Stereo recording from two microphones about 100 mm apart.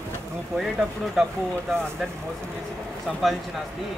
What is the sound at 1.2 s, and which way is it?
Speech, 5° right (ahead or behind).